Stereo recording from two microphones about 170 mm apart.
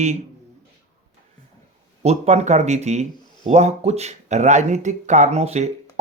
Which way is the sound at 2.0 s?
40° right (ahead or behind).